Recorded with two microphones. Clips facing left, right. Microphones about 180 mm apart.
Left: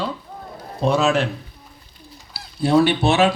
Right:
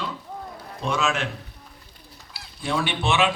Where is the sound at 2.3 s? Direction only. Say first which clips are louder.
Left 11 dB; 35° left (ahead or behind).